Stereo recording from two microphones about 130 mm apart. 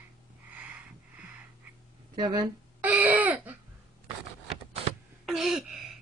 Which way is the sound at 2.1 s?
40° right (ahead or behind).